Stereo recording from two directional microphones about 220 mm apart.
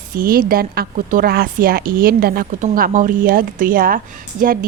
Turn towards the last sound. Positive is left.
turn(degrees=-40)  # may be behind; listen again after turning